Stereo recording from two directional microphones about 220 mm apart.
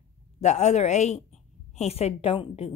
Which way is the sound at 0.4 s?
30° left (ahead or behind).